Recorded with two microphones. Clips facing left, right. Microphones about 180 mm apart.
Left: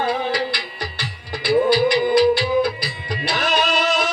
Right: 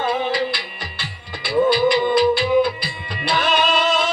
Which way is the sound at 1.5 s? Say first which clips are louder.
Even; 25° right (ahead or behind).